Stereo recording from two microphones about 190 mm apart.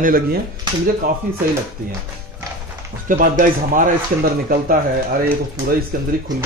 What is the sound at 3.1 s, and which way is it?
Speech, 45° right (ahead or behind).